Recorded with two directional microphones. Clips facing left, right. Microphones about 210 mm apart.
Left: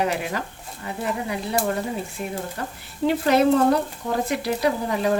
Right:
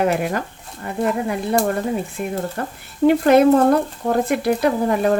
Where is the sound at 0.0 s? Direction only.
50° right (ahead or behind).